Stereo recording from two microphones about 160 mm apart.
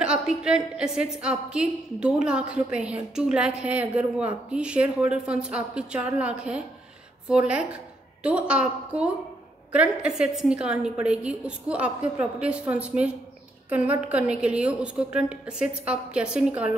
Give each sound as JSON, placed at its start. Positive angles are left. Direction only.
{"t": 0.0, "sound": "a woman's voice", "side_deg": -5}